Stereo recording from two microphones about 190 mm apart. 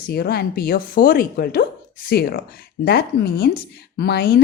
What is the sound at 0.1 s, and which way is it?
Speech, 55° left (ahead or behind).